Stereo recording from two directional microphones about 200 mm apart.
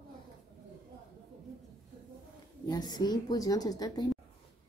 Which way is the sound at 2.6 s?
20° left (ahead or behind).